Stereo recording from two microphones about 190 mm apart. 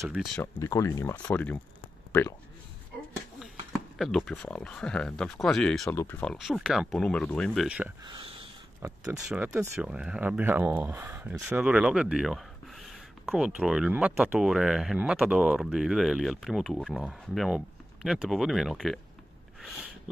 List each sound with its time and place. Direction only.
0.0 s speech: 5° right (ahead or behind)
0.4 s speech: 15° left (ahead or behind)
4.0 s speech: centre (ahead or behind)
6.3 s speech: centre (ahead or behind)
7.6 s speech: 5° right (ahead or behind)
8.0 s speech: 20° right (ahead or behind)
9.2 s speech: 5° right (ahead or behind)